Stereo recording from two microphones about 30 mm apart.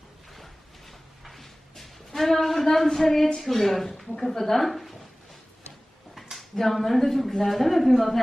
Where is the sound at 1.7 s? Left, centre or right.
Centre.